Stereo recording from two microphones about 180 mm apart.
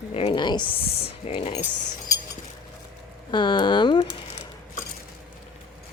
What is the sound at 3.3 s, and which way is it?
Speech, 25° left (ahead or behind).